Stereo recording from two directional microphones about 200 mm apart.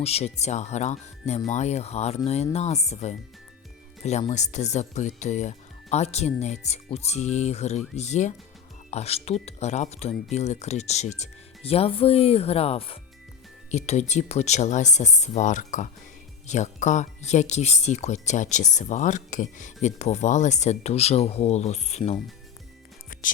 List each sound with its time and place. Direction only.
0.0 s speech: 30° left (ahead or behind)